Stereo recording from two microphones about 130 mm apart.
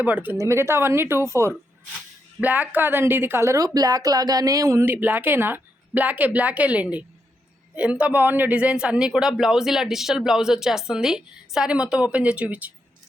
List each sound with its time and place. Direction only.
0.0 s speech: 10° right (ahead or behind)